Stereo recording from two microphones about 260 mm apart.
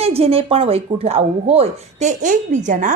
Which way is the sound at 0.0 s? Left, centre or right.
Right.